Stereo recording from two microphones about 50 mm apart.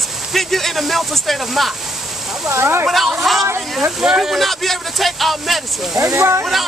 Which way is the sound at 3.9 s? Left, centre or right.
Centre.